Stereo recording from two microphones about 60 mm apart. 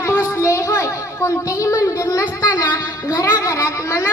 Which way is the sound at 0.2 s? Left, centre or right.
Left.